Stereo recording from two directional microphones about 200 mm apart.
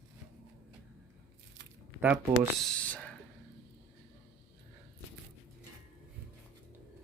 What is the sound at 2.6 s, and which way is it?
Speech, 5° left (ahead or behind).